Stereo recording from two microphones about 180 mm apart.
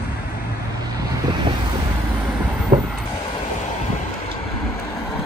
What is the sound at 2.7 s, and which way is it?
Vehicle, 25° right (ahead or behind).